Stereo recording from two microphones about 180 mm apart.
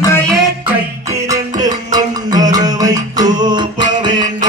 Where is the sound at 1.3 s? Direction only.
20° right (ahead or behind).